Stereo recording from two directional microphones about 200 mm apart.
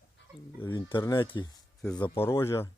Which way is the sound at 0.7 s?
25° left (ahead or behind).